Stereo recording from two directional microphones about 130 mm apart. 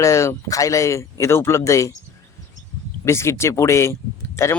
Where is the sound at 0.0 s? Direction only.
25° left (ahead or behind).